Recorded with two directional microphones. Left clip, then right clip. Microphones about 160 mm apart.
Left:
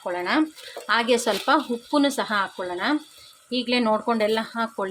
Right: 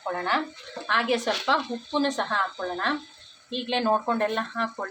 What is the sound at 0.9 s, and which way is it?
Speech, 55° left (ahead or behind).